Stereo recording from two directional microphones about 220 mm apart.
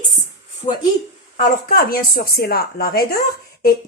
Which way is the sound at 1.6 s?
40° left (ahead or behind).